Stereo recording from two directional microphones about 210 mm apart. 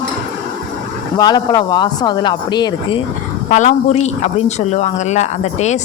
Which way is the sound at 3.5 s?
35° left (ahead or behind).